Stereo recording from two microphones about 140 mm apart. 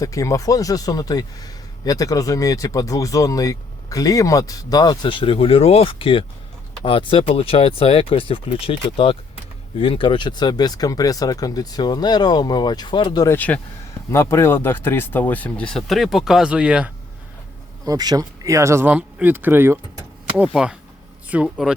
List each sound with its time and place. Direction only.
0.0 s speech: 25° left (ahead or behind)
13.2 s speech: 15° left (ahead or behind); by 16.9 s 5° right (ahead or behind)
17.8 s speech: 30° right (ahead or behind); by 21.7 s 5° right (ahead or behind)